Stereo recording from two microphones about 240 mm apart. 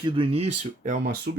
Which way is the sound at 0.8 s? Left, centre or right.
Right.